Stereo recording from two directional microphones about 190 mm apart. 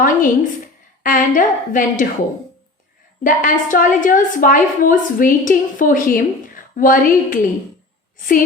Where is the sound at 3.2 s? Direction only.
45° left (ahead or behind).